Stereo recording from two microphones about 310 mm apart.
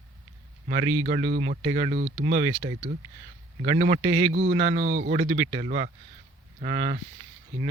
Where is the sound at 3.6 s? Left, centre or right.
Right.